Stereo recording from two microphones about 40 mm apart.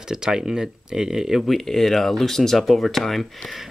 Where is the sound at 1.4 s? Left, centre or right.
Centre.